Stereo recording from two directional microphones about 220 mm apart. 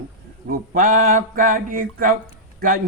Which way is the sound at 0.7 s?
35° right (ahead or behind).